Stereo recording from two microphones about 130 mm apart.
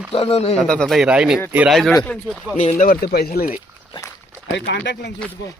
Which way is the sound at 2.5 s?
70° left (ahead or behind).